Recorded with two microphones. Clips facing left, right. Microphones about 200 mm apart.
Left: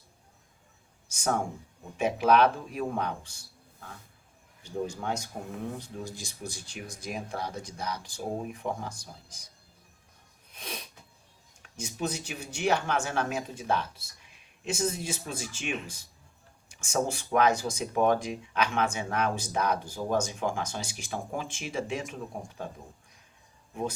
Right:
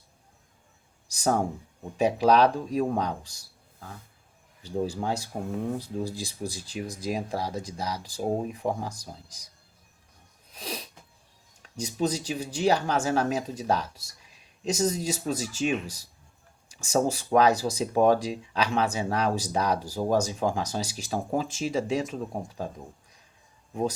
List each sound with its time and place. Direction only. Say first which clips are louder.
1.0 s speech: right 4 dB; 35° right (ahead or behind)
4.6 s speech: right 4 dB; 30° right (ahead or behind)
10.5 s sneeze: right 4 dB; 35° right (ahead or behind)
11.6 s speech: right 6 dB; 35° right (ahead or behind)